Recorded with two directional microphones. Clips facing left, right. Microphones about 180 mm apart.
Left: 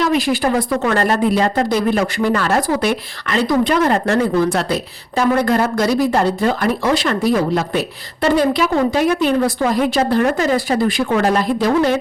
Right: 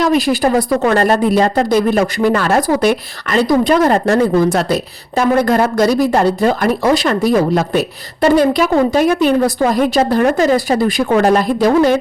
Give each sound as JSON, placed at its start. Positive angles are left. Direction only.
{"t": 0.0, "sound": "a woman's voice", "side_deg": -40}